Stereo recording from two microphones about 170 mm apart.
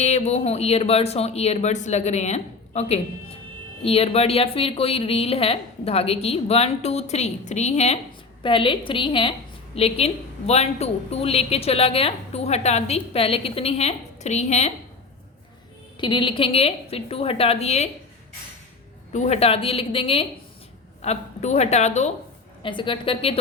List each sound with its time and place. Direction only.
0.0 s a woman's voice: 40° left (ahead or behind)
8.4 s a woman's voice: 30° left (ahead or behind)
16.0 s a woman's voice: 30° left (ahead or behind)
19.1 s a woman's voice: 40° left (ahead or behind)
22.6 s a woman's voice: 30° left (ahead or behind)